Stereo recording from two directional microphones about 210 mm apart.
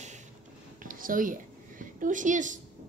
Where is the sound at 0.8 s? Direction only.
40° right (ahead or behind).